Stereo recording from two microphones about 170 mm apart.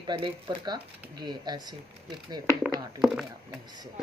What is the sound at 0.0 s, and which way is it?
A woman's voice, 30° right (ahead or behind).